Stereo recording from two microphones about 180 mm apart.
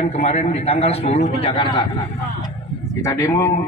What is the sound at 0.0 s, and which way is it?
A man's voice, 35° left (ahead or behind).